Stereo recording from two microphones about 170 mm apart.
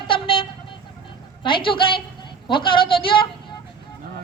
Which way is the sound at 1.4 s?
30° left (ahead or behind).